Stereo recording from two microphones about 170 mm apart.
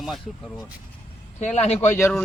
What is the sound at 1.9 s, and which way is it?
Speech, 15° left (ahead or behind).